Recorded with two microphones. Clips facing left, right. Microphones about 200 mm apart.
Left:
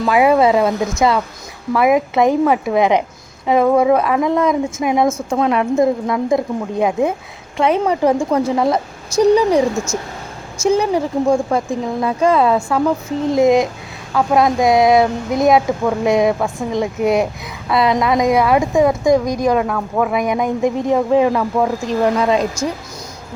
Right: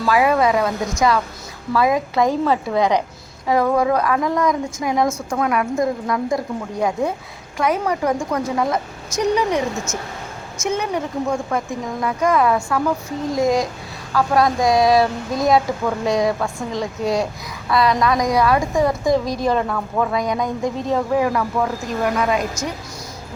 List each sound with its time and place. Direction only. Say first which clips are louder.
0.0 s a woman's voice: left 4 dB; 20° left (ahead or behind)
19.5 s speech: left 3 dB; 10° left (ahead or behind)
20.1 s a woman's voice: left 4 dB; 20° left (ahead or behind)